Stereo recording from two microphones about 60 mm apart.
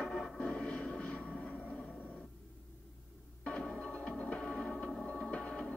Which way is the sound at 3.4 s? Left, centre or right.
Centre.